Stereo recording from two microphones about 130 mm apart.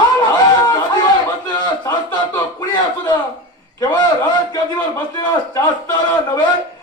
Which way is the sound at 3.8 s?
35° left (ahead or behind).